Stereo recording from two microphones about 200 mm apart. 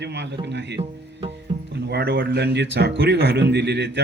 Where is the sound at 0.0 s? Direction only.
60° right (ahead or behind).